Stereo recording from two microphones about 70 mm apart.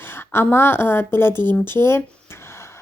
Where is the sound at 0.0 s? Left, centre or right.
Left.